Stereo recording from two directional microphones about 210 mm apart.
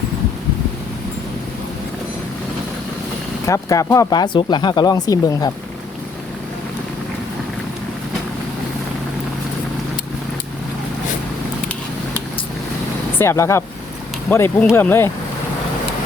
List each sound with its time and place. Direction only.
3.4 s speech: 15° left (ahead or behind)
13.1 s speech: 15° left (ahead or behind)